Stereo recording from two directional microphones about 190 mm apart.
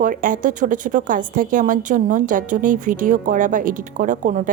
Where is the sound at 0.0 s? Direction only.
45° right (ahead or behind).